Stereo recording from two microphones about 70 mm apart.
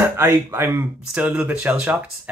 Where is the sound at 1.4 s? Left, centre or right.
Centre.